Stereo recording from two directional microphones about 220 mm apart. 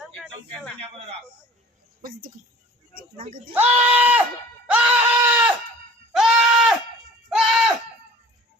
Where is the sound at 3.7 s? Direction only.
5° right (ahead or behind).